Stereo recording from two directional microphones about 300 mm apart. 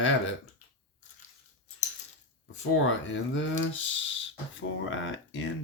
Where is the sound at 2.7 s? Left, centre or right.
Left.